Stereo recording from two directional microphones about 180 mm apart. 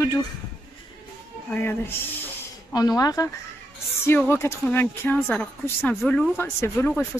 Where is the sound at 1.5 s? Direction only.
10° left (ahead or behind).